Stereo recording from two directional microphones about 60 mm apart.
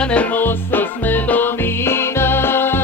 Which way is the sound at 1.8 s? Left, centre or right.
Left.